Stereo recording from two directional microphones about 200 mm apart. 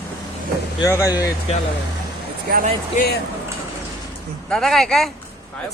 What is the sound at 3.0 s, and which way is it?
Speech, 40° left (ahead or behind).